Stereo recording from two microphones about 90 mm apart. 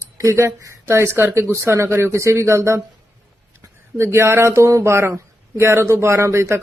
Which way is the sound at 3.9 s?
30° right (ahead or behind).